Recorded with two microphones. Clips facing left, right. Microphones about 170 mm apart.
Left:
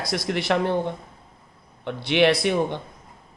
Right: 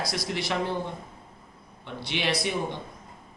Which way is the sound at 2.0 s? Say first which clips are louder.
Left 10 dB; 60° left (ahead or behind).